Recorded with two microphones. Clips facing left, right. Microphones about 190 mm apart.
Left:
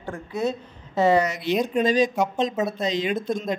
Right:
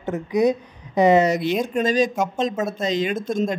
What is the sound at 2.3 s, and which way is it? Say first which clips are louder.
Speech: right 1 dB; 45° right (ahead or behind).